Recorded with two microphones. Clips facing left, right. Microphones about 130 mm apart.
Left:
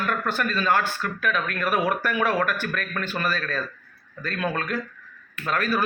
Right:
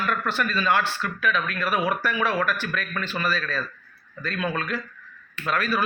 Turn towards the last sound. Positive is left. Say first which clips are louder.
# even
turn(degrees=45)  # may be behind; listen again after turning